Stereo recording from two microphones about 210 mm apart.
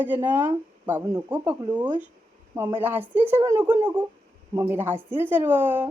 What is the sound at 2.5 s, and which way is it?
A woman's voice, 10° right (ahead or behind).